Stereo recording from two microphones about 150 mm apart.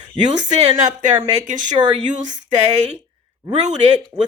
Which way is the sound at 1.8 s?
25° right (ahead or behind).